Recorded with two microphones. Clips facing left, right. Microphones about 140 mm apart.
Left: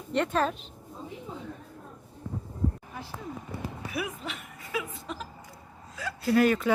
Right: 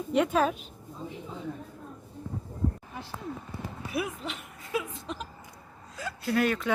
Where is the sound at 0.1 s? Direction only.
5° right (ahead or behind).